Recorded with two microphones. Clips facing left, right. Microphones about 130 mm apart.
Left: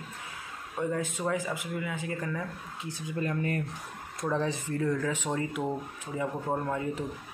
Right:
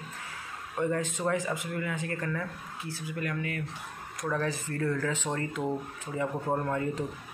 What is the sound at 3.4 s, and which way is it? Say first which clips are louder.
Speech: left 4 dB; 40° left (ahead or behind).